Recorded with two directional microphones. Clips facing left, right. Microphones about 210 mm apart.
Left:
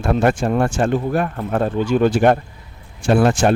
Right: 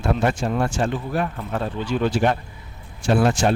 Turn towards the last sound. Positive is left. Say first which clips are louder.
# left 4 dB
turn(degrees=55)  # may be behind; listen again after turning